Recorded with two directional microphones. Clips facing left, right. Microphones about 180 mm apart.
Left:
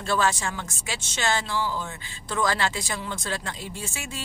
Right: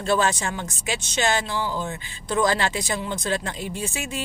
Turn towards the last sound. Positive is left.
turn(degrees=-15)  # may be behind; listen again after turning